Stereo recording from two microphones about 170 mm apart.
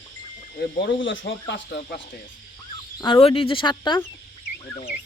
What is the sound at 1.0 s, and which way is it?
Speech, 90° left.